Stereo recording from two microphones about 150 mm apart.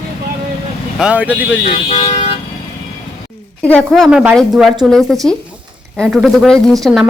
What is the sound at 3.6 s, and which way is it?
Speech, 5° left (ahead or behind).